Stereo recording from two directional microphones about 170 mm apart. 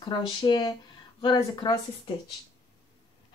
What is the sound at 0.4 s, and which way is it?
A woman's voice, 25° left (ahead or behind).